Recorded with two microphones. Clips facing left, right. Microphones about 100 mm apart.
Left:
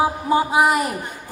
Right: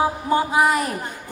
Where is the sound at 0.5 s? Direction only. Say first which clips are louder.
Left 1 dB; 10° left (ahead or behind).